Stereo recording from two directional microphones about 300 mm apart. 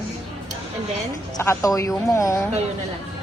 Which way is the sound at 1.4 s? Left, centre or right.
Centre.